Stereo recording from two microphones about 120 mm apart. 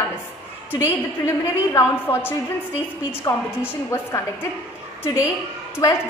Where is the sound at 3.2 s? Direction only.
25° left (ahead or behind).